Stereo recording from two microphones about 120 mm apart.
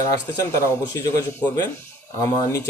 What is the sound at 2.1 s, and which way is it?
Speech, 30° left (ahead or behind).